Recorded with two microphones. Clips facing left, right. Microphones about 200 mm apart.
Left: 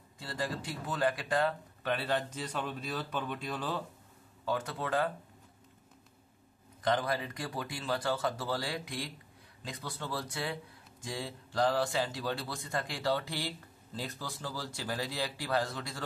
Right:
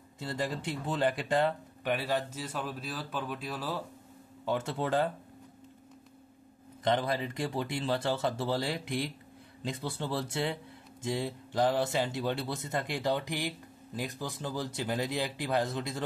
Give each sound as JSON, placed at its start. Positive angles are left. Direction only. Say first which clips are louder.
{"t": 0.2, "sound": "speech", "louder": "right 3 dB", "side_deg": -20}
{"t": 4.5, "sound": "speech", "louder": "right 3 dB", "side_deg": -25}
{"t": 6.8, "sound": "speech", "louder": "right 2 dB", "side_deg": -25}